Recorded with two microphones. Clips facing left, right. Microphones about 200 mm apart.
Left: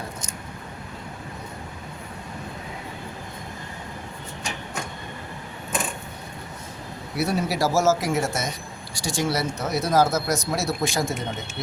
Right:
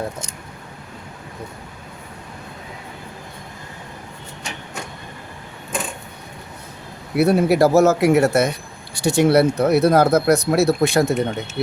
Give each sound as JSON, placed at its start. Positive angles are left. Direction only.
{"t": 7.2, "sound": "speech", "side_deg": -55}